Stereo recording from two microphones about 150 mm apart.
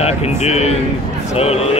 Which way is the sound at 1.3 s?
45° left (ahead or behind).